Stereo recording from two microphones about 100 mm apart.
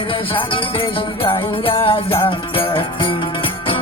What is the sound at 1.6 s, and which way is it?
Music, 60° left (ahead or behind).